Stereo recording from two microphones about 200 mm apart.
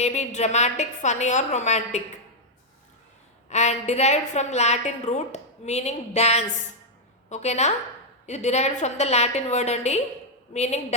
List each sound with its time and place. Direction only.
0.0 s a woman's voice: 35° left (ahead or behind)
3.5 s a woman's voice: 35° left (ahead or behind)